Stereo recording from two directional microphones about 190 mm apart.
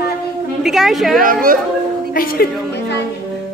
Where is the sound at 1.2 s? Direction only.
45° right (ahead or behind).